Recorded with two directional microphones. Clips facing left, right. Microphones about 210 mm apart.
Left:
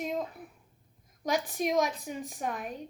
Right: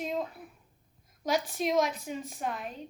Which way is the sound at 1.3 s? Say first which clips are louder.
Even; 15° left (ahead or behind).